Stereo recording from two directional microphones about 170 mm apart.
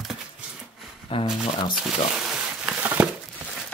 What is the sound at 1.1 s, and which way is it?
Speech, 30° left (ahead or behind).